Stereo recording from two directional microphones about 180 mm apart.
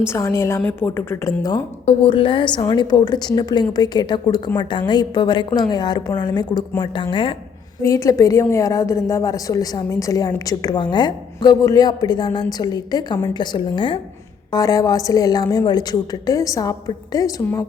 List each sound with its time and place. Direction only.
0.1 s a woman's voice: 15° left (ahead or behind)
1.5 s a woman's voice: 25° left (ahead or behind)
7.8 s a woman's voice: 15° left (ahead or behind)